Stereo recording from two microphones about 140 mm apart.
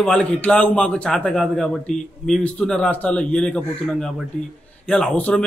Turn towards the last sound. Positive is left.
turn(degrees=5)  # may be behind; listen again after turning